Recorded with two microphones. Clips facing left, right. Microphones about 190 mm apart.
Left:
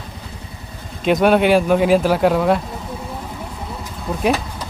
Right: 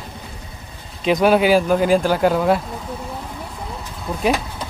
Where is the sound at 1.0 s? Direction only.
Centre (ahead or behind).